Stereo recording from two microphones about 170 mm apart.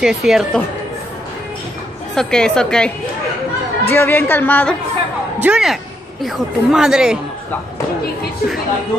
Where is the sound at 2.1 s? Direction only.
5° left (ahead or behind).